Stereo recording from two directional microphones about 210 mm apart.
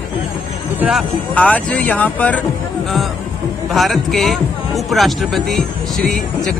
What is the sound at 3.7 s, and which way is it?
A man's voice, centre (ahead or behind).